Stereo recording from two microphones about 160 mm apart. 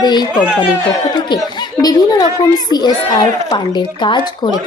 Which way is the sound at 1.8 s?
25° left (ahead or behind).